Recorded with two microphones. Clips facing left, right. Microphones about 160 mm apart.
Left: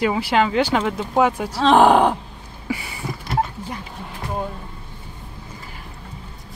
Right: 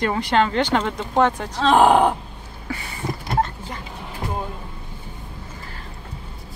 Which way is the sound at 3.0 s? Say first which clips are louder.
Right 3 dB; 35° right (ahead or behind).